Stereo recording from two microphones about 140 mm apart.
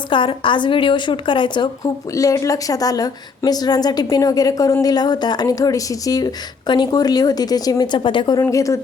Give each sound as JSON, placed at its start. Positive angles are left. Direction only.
{"t": 0.1, "sound": "a woman's voice", "side_deg": 35}
{"t": 8.4, "sound": "a woman's voice", "side_deg": 20}